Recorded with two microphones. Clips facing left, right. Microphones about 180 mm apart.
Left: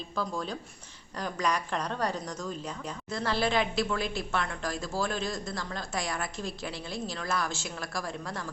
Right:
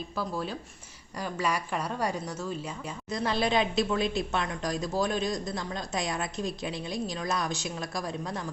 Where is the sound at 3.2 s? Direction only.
20° right (ahead or behind).